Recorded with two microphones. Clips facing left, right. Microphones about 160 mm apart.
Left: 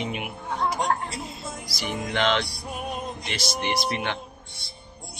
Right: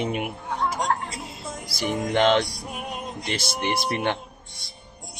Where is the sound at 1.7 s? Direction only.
50° right (ahead or behind).